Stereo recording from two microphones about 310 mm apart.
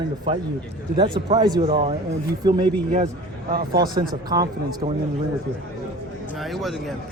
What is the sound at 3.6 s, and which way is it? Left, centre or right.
Speech, right.